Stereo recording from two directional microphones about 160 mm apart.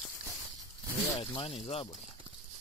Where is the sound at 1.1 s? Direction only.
35° left (ahead or behind).